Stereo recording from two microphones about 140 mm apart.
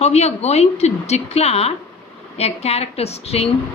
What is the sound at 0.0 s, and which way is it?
A woman's voice, 50° left (ahead or behind).